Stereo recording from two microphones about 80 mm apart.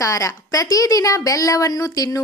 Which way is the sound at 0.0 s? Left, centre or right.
Left.